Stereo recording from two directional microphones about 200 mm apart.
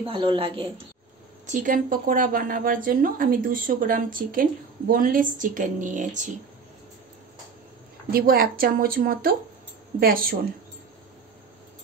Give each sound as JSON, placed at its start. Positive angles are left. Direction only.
{"t": 0.0, "sound": "a woman's voice", "side_deg": -25}
{"t": 1.4, "sound": "speech", "side_deg": -40}
{"t": 8.1, "sound": "speech", "side_deg": -50}